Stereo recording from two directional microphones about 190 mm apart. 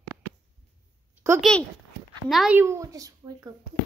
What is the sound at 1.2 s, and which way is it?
Speech, 15° right (ahead or behind).